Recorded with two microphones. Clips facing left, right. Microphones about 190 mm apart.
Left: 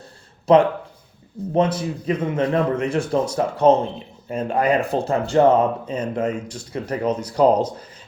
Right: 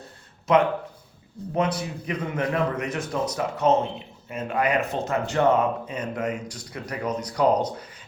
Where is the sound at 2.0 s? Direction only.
25° left (ahead or behind).